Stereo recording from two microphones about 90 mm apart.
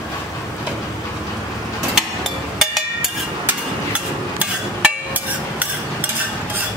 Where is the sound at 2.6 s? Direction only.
Centre (ahead or behind).